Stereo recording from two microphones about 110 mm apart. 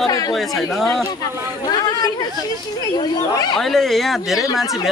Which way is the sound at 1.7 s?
40° left (ahead or behind).